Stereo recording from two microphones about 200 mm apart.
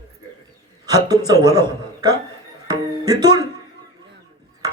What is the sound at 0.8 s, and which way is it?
A man's voice, 20° right (ahead or behind).